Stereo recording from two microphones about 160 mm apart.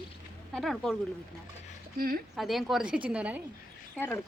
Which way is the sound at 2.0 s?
65° right (ahead or behind).